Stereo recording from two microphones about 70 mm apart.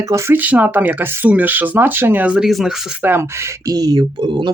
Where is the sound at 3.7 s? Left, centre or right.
Right.